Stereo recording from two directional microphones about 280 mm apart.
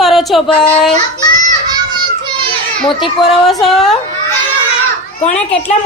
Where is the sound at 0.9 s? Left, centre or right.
Centre.